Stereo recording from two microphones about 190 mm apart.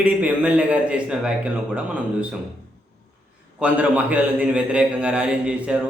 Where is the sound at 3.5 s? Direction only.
5° right (ahead or behind).